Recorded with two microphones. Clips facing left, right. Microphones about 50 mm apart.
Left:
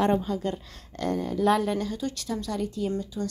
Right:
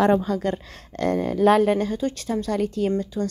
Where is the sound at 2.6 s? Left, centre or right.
Right.